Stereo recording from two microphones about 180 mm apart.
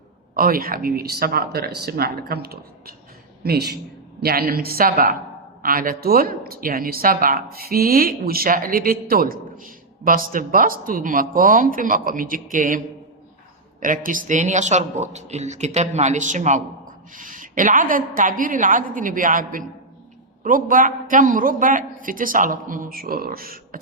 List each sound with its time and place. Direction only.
0.3 s speech: 55° right (ahead or behind)
13.8 s speech: 50° right (ahead or behind)